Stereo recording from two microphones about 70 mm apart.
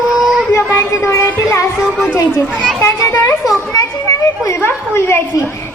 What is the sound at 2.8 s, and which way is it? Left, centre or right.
Speech, left.